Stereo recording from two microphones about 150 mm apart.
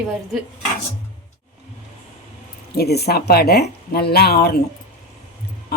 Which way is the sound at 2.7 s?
90° left.